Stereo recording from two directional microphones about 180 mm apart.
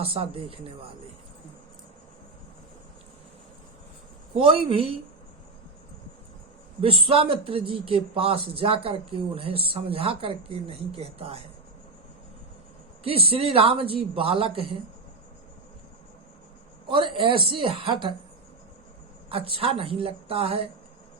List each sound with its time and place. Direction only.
0.0 s speech: 30° right (ahead or behind)
4.4 s speech: 30° right (ahead or behind)
6.8 s speech: 30° right (ahead or behind)
13.1 s speech: 30° right (ahead or behind)
16.9 s speech: 30° right (ahead or behind)
19.3 s speech: 30° right (ahead or behind)